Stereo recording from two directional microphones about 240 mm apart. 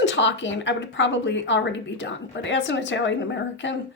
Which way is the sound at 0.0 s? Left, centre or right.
Left.